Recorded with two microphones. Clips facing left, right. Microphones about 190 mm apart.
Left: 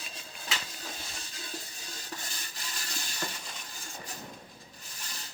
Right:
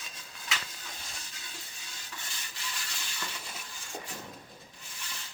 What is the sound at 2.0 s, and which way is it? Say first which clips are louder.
Rub: left 3 dB; 40° left (ahead or behind).